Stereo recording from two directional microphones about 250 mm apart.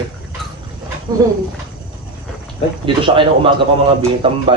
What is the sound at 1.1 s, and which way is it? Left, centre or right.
Speech, centre.